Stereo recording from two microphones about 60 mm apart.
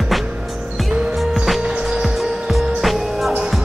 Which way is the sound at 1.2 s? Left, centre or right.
Centre.